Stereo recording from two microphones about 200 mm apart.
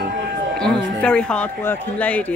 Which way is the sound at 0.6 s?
5° left (ahead or behind).